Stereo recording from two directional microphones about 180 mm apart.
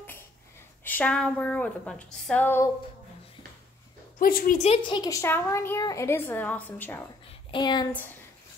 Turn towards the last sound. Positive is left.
turn(degrees=25)  # may be behind; listen again after turning